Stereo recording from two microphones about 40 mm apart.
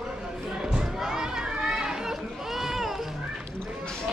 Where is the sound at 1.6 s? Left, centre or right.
Centre.